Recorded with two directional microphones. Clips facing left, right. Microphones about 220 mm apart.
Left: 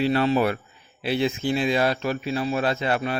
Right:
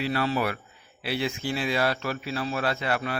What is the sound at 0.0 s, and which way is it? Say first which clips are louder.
A man's voice: left 6 dB; 25° left (ahead or behind).